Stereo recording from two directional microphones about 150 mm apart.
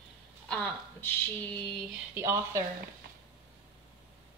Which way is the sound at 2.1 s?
20° right (ahead or behind).